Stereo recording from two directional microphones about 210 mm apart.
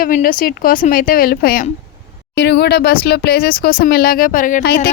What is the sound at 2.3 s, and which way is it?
A woman's voice, 55° left (ahead or behind).